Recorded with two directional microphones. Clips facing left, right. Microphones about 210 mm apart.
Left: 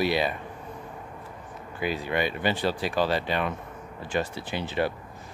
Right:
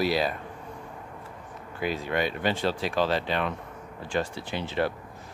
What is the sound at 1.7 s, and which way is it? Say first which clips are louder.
Speech: even; centre (ahead or behind).